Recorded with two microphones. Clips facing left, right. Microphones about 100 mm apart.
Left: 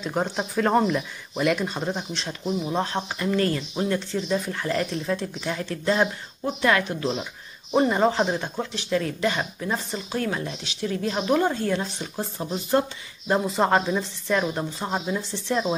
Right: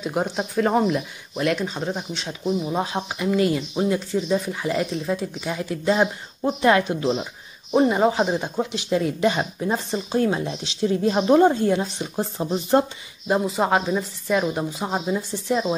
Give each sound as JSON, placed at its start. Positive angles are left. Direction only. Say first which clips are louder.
{"t": 0.0, "sound": "speech", "louder": "right 2 dB", "side_deg": -5}
{"t": 7.7, "sound": "speech", "louder": "right 2 dB", "side_deg": -5}
{"t": 13.3, "sound": "speech", "louder": "right 1 dB", "side_deg": -5}